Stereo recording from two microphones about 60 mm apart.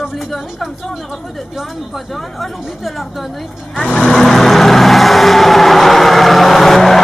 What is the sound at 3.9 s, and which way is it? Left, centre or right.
Vehicle, centre.